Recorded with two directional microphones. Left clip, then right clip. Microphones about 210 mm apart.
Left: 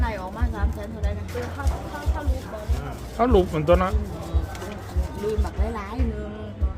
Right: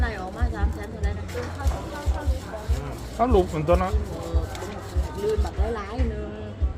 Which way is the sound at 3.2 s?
15° left (ahead or behind).